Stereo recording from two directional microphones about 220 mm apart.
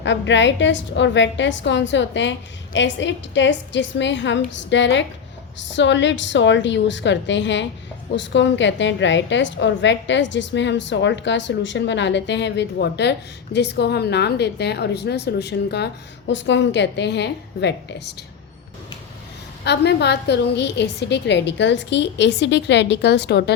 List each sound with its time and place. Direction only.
0.0 s a woman's voice: 55° left (ahead or behind)
19.6 s a woman's voice: 50° left (ahead or behind)